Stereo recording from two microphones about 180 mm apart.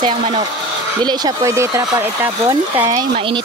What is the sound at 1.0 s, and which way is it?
Speech, 20° right (ahead or behind).